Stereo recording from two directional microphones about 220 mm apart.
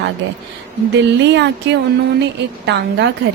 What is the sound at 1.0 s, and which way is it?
Speech, 50° right (ahead or behind).